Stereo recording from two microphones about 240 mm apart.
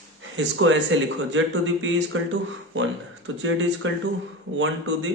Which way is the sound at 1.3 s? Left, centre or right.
Right.